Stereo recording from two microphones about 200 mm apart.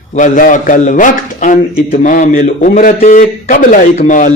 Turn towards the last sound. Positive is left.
turn(degrees=40)  # may be behind; listen again after turning